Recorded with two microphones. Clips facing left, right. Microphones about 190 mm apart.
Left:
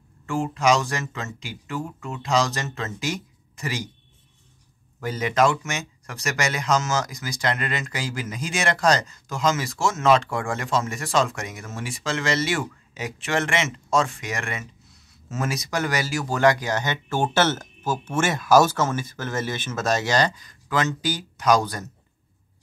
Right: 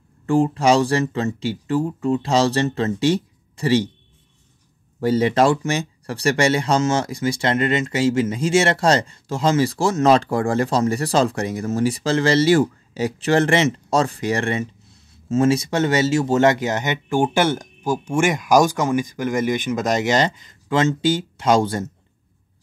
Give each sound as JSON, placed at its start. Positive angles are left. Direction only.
{"t": 0.3, "sound": "speech", "side_deg": -35}
{"t": 5.0, "sound": "speech", "side_deg": -30}